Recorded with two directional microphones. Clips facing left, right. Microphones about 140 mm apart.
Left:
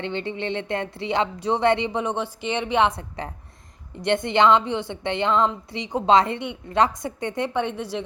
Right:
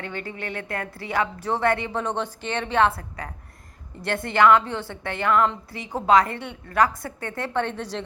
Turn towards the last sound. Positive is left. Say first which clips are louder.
# left 2 dB
turn(degrees=15)  # may be behind; listen again after turning